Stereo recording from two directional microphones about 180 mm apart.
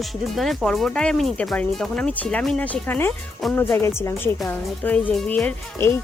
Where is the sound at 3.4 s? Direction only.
Centre (ahead or behind).